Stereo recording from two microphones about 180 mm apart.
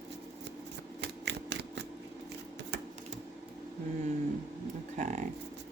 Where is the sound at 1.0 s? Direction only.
75° right (ahead or behind).